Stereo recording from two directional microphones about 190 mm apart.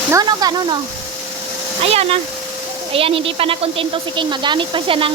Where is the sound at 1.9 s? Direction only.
30° right (ahead or behind).